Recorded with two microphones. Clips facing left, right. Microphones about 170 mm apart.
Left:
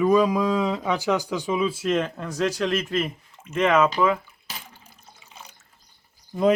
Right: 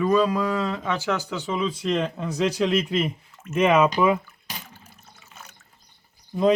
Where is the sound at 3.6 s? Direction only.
15° right (ahead or behind).